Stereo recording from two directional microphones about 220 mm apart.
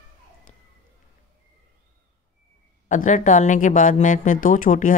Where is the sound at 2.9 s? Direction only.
35° left (ahead or behind).